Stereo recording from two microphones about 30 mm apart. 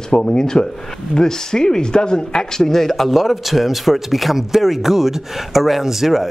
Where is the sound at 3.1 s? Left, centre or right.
Centre.